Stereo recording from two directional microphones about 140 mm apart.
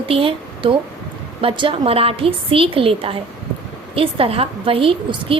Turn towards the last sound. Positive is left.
turn(degrees=-40)  # may be behind; listen again after turning